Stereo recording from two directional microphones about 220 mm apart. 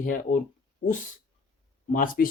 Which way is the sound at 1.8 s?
35° left (ahead or behind).